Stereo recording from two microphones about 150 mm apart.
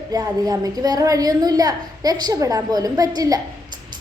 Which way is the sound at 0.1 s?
25° right (ahead or behind).